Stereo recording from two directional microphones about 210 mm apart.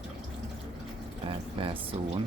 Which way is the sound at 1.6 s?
25° right (ahead or behind).